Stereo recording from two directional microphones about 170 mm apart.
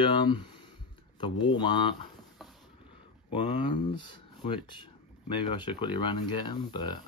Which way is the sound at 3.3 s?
30° left (ahead or behind).